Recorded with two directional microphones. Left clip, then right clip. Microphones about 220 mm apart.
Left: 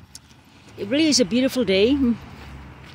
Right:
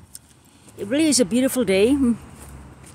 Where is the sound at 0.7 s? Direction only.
Centre (ahead or behind).